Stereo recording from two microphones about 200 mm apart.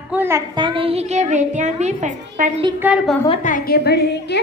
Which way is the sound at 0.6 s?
25° right (ahead or behind).